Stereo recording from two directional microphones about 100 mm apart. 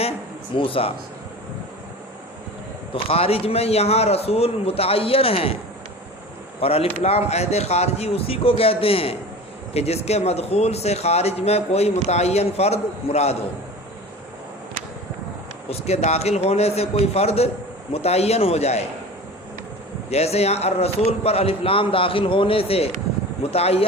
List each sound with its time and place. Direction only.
0.5 s speech: 65° left (ahead or behind)
2.9 s a man's voice: 80° left
6.6 s a man's voice: 80° left
9.7 s a man's voice: 90° left
15.7 s a man's voice: 90° left
20.1 s a man's voice: 90° left